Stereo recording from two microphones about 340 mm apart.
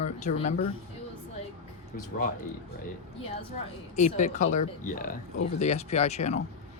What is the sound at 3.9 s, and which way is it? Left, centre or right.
Speech, left.